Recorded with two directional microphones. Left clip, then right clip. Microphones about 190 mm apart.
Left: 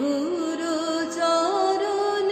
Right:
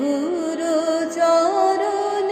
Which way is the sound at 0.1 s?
25° right (ahead or behind).